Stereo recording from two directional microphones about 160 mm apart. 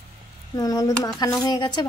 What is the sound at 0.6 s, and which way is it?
Speech, 25° left (ahead or behind).